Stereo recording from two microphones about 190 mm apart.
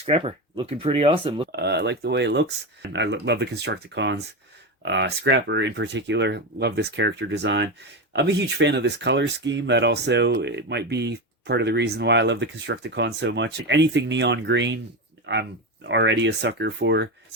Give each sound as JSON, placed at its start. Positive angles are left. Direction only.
{"t": 0.0, "sound": "speech", "side_deg": -30}
{"t": 1.5, "sound": "speech", "side_deg": -60}